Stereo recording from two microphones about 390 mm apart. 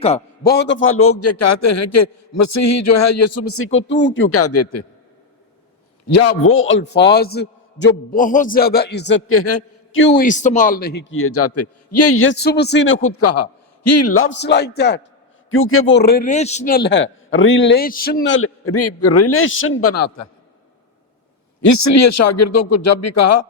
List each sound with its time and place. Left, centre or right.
0.0 s a man's voice: centre; by 4.9 s left
6.1 s a man's voice: left
10.1 s a man's voice: centre; by 20.2 s left
21.6 s a man's voice: left